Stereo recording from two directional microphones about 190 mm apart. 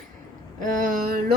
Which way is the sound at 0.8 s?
50° right (ahead or behind).